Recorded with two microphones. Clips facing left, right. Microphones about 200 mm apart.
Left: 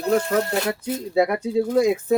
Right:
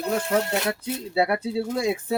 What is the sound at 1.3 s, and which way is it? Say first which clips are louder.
Speech: left 6 dB; 45° left (ahead or behind).